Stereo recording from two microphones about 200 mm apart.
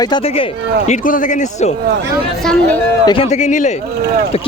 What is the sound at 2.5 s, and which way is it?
Speech, 10° left (ahead or behind).